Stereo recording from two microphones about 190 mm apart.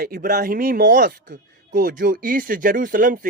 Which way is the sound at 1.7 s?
45° right (ahead or behind).